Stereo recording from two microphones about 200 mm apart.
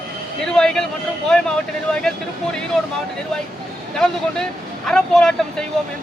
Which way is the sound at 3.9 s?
5° left (ahead or behind).